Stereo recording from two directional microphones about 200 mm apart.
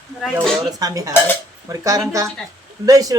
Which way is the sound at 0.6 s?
15° right (ahead or behind).